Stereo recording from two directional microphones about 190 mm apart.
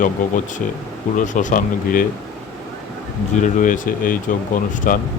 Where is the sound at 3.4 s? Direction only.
45° left (ahead or behind).